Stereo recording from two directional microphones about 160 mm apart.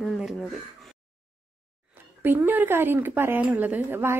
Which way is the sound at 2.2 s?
10° right (ahead or behind).